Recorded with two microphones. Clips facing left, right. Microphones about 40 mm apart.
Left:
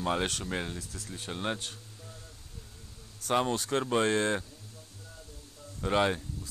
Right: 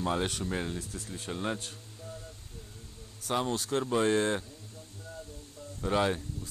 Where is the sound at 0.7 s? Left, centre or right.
Right.